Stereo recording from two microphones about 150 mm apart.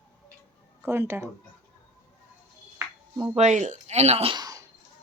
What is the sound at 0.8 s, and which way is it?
Speech, 15° right (ahead or behind).